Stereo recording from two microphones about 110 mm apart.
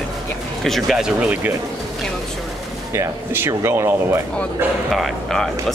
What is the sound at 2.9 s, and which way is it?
Speech, 20° right (ahead or behind).